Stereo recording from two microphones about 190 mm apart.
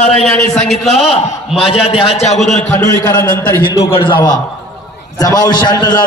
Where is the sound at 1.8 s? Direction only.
30° left (ahead or behind).